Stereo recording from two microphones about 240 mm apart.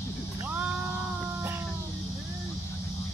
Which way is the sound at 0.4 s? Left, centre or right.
Centre.